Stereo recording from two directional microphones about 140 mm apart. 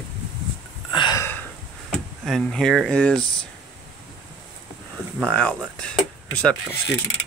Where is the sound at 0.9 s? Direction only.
35° left (ahead or behind).